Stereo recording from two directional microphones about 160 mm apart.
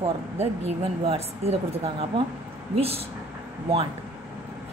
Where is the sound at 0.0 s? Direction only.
40° right (ahead or behind).